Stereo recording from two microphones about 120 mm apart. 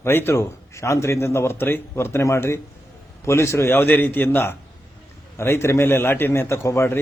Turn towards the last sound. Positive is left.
turn(degrees=20)  # may be behind; listen again after turning